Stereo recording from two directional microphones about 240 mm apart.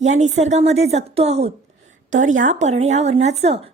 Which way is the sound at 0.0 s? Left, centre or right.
Right.